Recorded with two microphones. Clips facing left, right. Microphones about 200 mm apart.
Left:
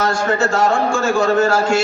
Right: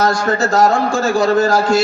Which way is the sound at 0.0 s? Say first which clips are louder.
Right 2 dB; 40° right (ahead or behind).